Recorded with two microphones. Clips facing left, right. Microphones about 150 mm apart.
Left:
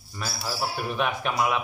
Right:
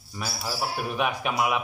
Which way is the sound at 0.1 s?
10° right (ahead or behind).